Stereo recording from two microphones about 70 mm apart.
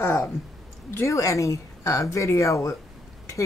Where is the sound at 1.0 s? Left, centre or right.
Left.